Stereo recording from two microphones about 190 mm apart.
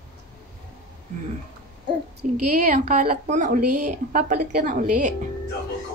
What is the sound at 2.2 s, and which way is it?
A woman's voice, 40° right (ahead or behind).